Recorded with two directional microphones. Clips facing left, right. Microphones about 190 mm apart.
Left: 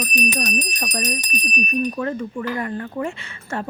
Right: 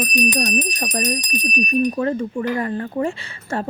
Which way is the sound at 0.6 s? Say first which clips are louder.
Right 3 dB; 30° right (ahead or behind).